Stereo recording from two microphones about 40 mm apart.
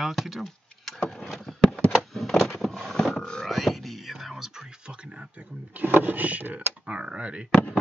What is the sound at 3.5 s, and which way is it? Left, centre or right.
Speech, centre.